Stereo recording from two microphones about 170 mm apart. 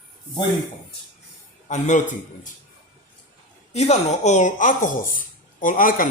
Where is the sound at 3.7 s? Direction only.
40° left (ahead or behind).